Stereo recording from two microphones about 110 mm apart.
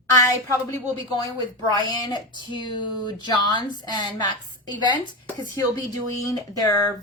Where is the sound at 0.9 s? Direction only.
40° left (ahead or behind).